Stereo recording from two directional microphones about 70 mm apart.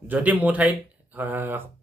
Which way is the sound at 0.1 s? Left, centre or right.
Right.